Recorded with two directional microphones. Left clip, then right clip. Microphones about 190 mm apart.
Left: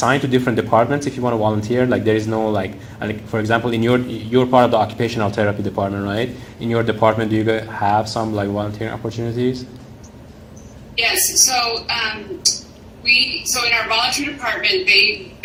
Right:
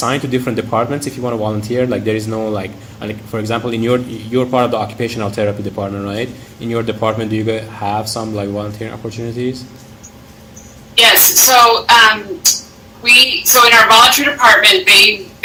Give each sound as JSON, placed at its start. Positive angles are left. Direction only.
{"t": 0.0, "sound": "a man's voice", "side_deg": 5}
{"t": 10.9, "sound": "a woman's voice", "side_deg": -40}